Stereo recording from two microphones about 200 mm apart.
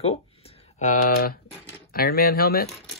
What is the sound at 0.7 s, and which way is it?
Speech, 40° left (ahead or behind).